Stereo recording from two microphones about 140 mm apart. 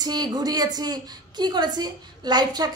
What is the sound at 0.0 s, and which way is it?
A woman's voice, 30° right (ahead or behind).